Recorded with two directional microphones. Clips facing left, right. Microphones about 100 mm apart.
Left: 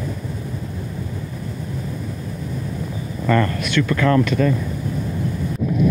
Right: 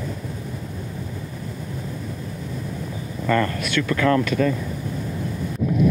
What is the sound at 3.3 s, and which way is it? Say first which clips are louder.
Speech: left 2 dB; 30° left (ahead or behind).